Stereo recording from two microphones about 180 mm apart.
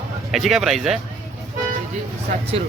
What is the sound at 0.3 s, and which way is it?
Speech, centre (ahead or behind).